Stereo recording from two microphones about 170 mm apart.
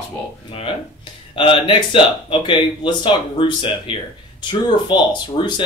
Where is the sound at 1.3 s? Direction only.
30° left (ahead or behind).